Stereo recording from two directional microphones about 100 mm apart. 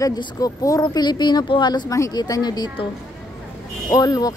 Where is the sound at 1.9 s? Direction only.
30° left (ahead or behind).